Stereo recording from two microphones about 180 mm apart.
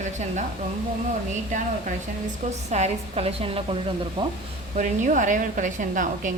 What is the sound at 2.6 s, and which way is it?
A woman's voice, 40° right (ahead or behind).